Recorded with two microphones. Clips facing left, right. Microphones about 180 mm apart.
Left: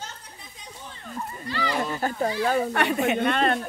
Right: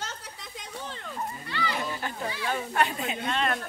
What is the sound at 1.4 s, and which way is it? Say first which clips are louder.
Children playing: left 6 dB; 35° left (ahead or behind).